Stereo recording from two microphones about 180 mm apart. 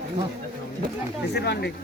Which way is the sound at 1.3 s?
65° left (ahead or behind).